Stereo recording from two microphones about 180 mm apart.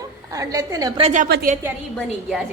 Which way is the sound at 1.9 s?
Centre (ahead or behind).